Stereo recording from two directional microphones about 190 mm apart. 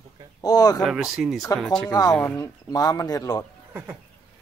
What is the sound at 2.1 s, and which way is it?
Speech, 10° left (ahead or behind).